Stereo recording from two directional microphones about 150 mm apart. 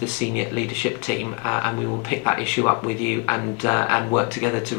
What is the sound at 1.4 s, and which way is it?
Speech, 20° left (ahead or behind).